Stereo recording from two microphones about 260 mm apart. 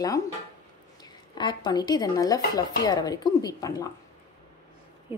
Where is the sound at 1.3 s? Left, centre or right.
Centre.